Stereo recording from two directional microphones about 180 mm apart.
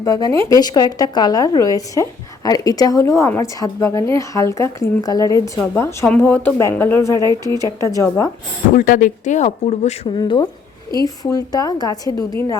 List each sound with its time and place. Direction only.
0.0 s a woman's voice: 20° left (ahead or behind)
8.7 s speech: 50° left (ahead or behind)
10.2 s a woman's voice: 25° left (ahead or behind)